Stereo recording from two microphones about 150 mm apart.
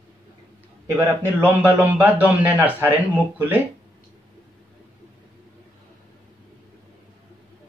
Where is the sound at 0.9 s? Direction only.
15° right (ahead or behind).